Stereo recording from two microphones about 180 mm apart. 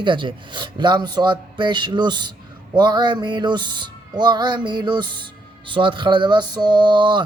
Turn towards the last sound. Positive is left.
turn(degrees=-25)  # may be behind; listen again after turning